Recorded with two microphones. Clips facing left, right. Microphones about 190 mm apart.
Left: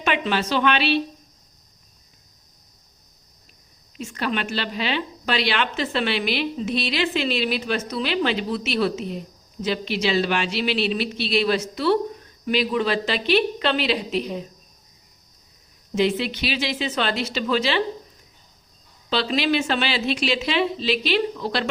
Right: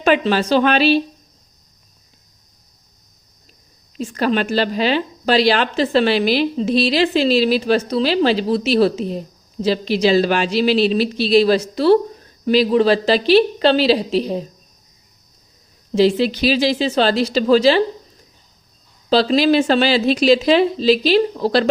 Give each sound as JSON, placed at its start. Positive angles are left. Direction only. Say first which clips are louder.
{"t": 0.0, "sound": "a woman's voice", "louder": "right 7 dB", "side_deg": -35}
{"t": 3.9, "sound": "a woman's voice", "louder": "right 8 dB", "side_deg": -40}
{"t": 16.0, "sound": "a woman's voice", "louder": "right 7 dB", "side_deg": -35}
{"t": 19.1, "sound": "a woman's voice", "louder": "right 8 dB", "side_deg": -35}